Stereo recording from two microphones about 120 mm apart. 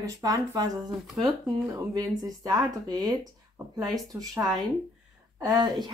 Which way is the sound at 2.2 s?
35° right (ahead or behind).